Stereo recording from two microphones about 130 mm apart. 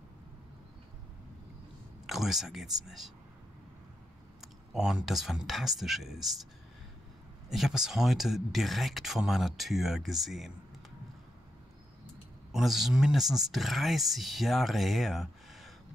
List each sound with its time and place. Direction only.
2.0 s speech: centre (ahead or behind)
4.4 s speech: 5° right (ahead or behind)
7.4 s speech: centre (ahead or behind)
12.5 s speech: centre (ahead or behind)